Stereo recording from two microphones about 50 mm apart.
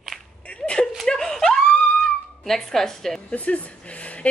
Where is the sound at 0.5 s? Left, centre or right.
Centre.